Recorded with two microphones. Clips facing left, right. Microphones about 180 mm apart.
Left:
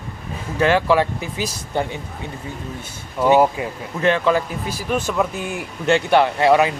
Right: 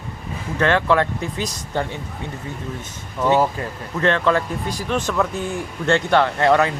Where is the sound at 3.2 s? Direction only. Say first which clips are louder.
Left 3 dB; 10° left (ahead or behind).